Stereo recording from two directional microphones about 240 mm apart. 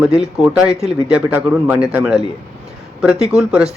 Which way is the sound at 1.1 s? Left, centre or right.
Centre.